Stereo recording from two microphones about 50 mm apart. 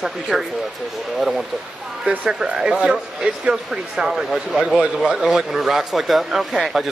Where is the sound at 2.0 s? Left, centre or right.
Centre.